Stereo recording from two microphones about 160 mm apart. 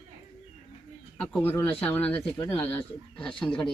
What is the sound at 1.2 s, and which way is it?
Speech, 10° left (ahead or behind).